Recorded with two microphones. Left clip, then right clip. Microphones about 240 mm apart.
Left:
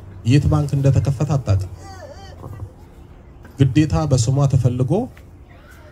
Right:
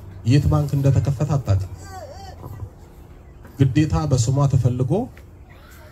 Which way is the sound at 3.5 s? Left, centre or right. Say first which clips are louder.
Left 3 dB; left.